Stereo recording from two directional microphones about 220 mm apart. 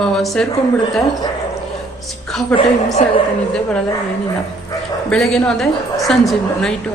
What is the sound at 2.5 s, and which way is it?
Speech, 25° left (ahead or behind).